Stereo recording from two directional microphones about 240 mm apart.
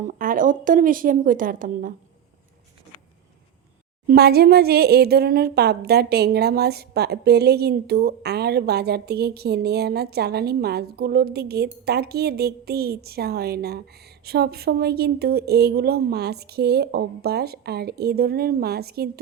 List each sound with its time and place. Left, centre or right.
0.1 s speech: right
4.0 s speech: right